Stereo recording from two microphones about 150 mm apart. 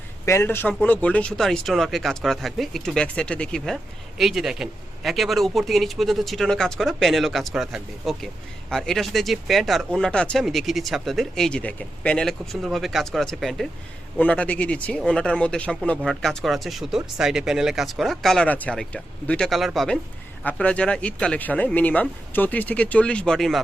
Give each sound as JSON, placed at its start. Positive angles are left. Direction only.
{"t": 0.3, "sound": "speech", "side_deg": 15}